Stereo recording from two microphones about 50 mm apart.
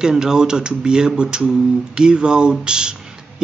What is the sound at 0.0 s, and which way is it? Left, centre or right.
Speech, centre.